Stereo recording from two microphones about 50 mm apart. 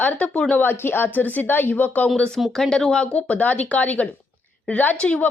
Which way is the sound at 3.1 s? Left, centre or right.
Left.